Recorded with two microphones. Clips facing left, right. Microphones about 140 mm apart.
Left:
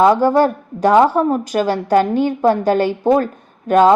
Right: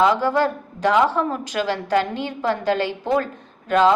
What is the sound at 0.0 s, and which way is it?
A woman's voice, 45° left (ahead or behind).